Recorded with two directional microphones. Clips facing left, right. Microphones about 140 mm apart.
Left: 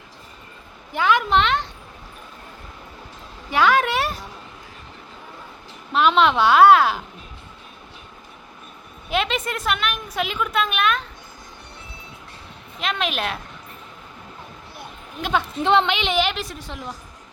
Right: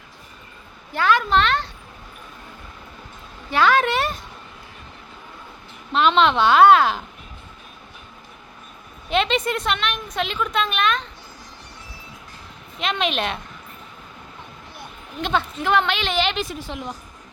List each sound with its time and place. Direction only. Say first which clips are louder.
0.9 s speech: even; 15° left (ahead or behind)
3.5 s a woman's voice: even; 10° left (ahead or behind)
5.9 s a woman's voice: even; 10° left (ahead or behind)
9.0 s a woman's voice: right 3 dB; 5° left (ahead or behind)
12.8 s a woman's voice: right 2 dB; centre (ahead or behind)
15.2 s a woman's voice: even; 10° left (ahead or behind)
15.6 s a woman's voice: left 4 dB; 25° left (ahead or behind); by 16.9 s 5° right (ahead or behind)